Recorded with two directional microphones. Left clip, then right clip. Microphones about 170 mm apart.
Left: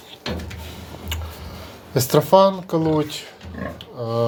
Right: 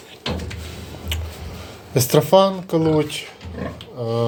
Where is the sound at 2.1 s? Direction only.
5° left (ahead or behind).